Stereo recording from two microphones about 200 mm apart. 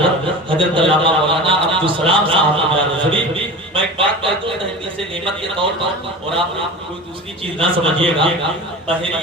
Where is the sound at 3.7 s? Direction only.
25° right (ahead or behind).